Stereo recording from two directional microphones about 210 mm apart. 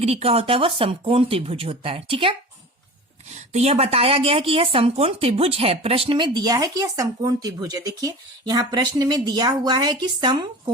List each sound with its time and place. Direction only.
0.0 s a woman's voice: 30° right (ahead or behind)